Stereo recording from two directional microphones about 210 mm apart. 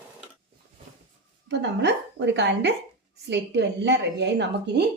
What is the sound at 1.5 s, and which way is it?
A woman's voice, 55° right (ahead or behind).